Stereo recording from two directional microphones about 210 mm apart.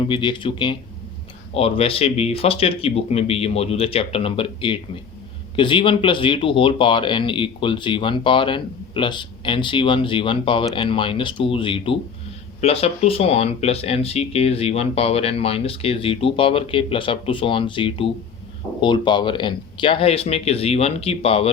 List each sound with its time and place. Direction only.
0.0 s speech: 25° left (ahead or behind)